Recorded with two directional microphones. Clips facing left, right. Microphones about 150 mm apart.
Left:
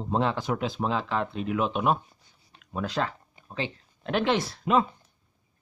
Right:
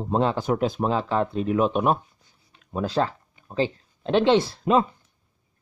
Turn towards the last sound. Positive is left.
turn(degrees=-40)  # may be behind; listen again after turning